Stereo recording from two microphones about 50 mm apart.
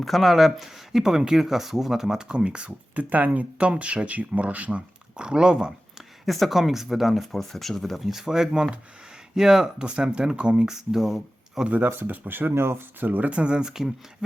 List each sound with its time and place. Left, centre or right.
0.0 s speech: centre; by 4.8 s right
5.1 s speech: centre
6.2 s speech: centre
8.0 s speech: centre
10.7 s speech: centre
11.9 s speech: right; by 13.8 s centre